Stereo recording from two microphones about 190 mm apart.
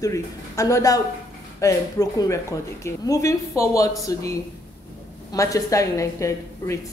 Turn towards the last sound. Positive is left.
turn(degrees=15)  # may be behind; listen again after turning